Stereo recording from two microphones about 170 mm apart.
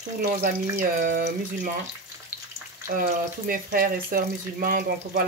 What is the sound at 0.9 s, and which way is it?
Speech, 75° right (ahead or behind).